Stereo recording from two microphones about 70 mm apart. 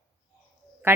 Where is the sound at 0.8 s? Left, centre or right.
Right.